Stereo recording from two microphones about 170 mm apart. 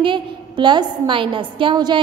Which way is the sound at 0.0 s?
30° right (ahead or behind).